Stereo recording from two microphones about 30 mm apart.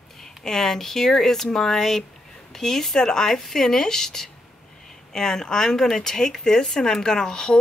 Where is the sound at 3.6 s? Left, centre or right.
Centre.